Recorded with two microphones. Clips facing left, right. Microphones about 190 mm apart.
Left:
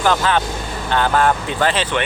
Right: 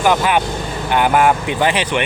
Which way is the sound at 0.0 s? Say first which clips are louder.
Right 2 dB; 15° right (ahead or behind).